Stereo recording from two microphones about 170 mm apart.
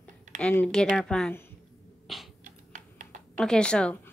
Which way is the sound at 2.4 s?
50° right (ahead or behind).